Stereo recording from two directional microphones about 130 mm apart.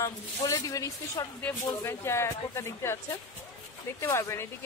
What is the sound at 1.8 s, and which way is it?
Speech, 20° left (ahead or behind).